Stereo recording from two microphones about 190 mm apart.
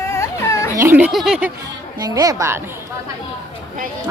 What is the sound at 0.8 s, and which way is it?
Speech, 10° right (ahead or behind).